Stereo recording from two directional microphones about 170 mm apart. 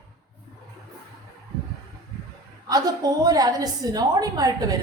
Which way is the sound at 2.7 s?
20° right (ahead or behind).